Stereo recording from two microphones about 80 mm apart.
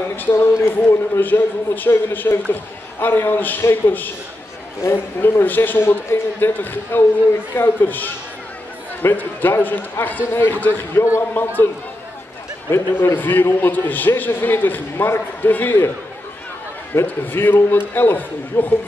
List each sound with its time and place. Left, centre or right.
0.1 s a man's voice: left
12.7 s a man's voice: left
16.9 s a man's voice: left